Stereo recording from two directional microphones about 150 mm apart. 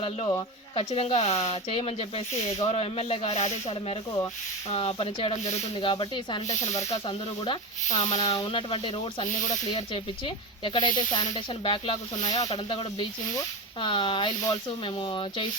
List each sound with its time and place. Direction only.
0.8 s speech: 40° left (ahead or behind)